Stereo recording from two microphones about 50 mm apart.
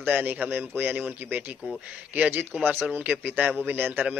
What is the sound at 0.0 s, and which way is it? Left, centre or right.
Speech, right.